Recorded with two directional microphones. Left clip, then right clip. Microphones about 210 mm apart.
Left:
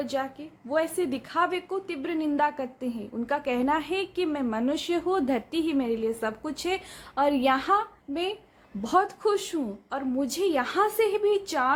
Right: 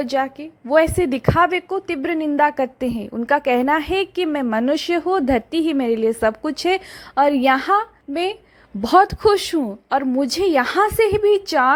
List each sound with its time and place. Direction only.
0.0 s a woman's voice: 35° right (ahead or behind)